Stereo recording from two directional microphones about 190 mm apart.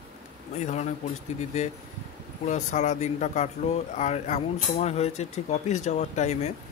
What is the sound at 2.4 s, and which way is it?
Speech, 40° left (ahead or behind).